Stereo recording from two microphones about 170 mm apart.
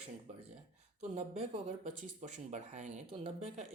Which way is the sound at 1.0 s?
40° right (ahead or behind).